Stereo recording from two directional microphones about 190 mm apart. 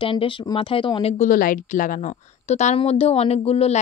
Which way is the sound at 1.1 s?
45° left (ahead or behind).